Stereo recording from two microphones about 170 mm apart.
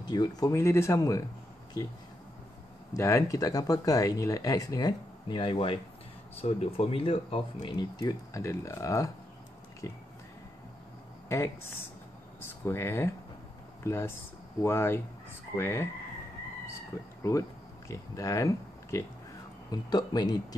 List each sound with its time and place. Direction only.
0.0 s speech: 25° left (ahead or behind)
2.9 s speech: 15° left (ahead or behind)
11.2 s speech: 15° left (ahead or behind)
17.2 s speech: 20° left (ahead or behind)